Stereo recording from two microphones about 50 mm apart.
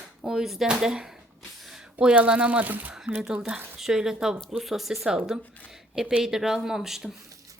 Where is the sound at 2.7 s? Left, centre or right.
Right.